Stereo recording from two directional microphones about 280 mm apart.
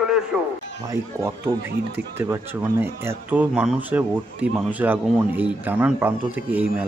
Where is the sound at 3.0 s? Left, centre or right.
Centre.